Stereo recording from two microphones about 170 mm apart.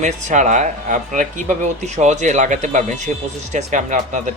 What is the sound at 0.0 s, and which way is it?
Speech, 45° right (ahead or behind).